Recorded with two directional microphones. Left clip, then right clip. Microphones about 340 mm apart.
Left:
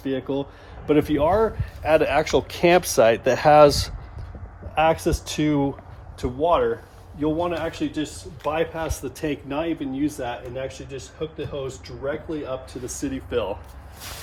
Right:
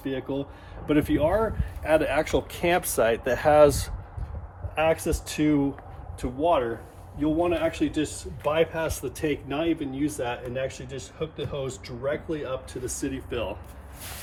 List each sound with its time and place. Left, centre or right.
0.0 s speech: centre